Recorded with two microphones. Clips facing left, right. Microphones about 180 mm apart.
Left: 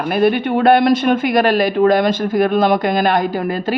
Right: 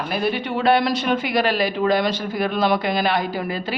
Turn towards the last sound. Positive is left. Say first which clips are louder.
# left 6 dB
turn(degrees=50)  # may be behind; listen again after turning